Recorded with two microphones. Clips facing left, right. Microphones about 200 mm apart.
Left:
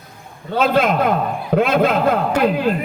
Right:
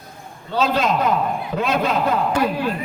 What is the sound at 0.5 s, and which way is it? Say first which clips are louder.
A man's voice: left 3 dB; 55° left (ahead or behind).